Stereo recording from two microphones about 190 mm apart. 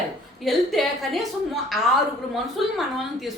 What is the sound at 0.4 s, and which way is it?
Speech, centre (ahead or behind).